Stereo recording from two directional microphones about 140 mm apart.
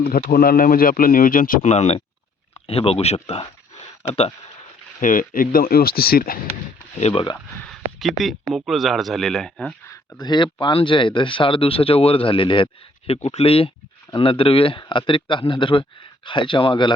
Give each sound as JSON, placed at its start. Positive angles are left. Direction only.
{"t": 0.0, "sound": "a man's voice", "side_deg": 90}
{"t": 2.6, "sound": "speech", "side_deg": 45}
{"t": 4.9, "sound": "a man's voice", "side_deg": 70}
{"t": 7.0, "sound": "speech", "side_deg": 40}
{"t": 7.6, "sound": "speech", "side_deg": 0}
{"t": 9.8, "sound": "speech", "side_deg": 25}